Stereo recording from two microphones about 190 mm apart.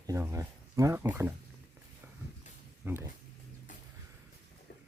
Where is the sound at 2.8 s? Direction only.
10° right (ahead or behind).